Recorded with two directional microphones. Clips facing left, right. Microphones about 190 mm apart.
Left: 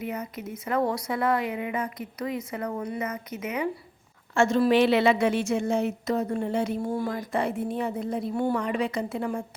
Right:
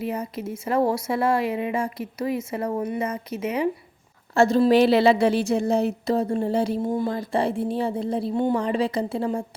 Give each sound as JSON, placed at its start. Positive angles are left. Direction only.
{"t": 0.0, "sound": "a woman's voice", "side_deg": -30}
{"t": 6.8, "sound": "speech", "side_deg": -15}
{"t": 7.1, "sound": "a woman's voice", "side_deg": -30}